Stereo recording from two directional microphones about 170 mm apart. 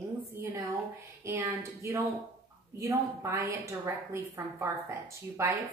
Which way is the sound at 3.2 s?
15° right (ahead or behind).